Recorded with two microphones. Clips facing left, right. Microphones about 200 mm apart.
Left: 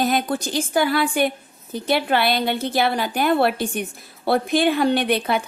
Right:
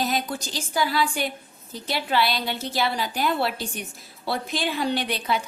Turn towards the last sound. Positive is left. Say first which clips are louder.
# left 6 dB
turn(degrees=55)  # may be behind; listen again after turning